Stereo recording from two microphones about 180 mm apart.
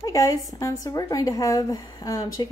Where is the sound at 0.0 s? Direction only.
20° left (ahead or behind).